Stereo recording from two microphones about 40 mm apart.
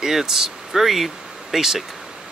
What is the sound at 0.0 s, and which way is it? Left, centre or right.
Speech, centre.